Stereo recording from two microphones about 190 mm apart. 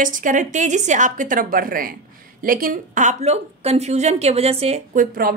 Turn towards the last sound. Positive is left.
turn(degrees=-35)  # may be behind; listen again after turning